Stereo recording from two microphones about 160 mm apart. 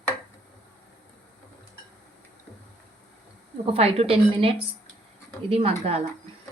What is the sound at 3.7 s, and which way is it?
A woman's voice, 40° right (ahead or behind).